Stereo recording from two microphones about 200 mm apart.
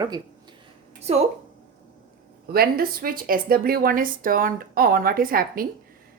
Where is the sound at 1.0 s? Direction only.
30° right (ahead or behind).